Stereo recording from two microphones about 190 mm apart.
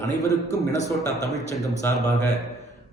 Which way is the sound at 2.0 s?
35° left (ahead or behind).